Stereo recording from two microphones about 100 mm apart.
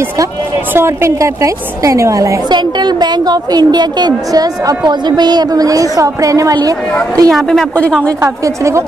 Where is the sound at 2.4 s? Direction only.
45° right (ahead or behind).